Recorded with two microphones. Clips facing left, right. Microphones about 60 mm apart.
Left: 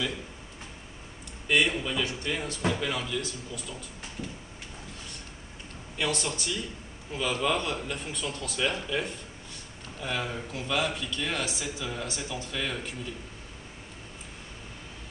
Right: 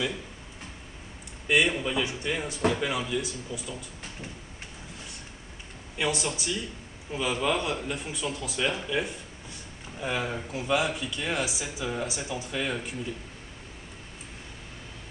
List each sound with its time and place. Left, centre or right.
1.5 s speech: centre
5.9 s speech: centre